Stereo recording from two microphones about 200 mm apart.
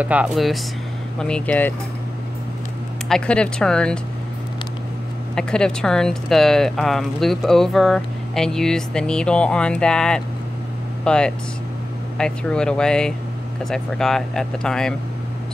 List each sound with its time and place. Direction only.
0.0 s speech: 5° right (ahead or behind)
3.1 s speech: 5° left (ahead or behind)
5.3 s speech: 5° left (ahead or behind)